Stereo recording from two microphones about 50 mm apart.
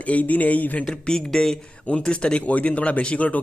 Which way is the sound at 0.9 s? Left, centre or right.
Centre.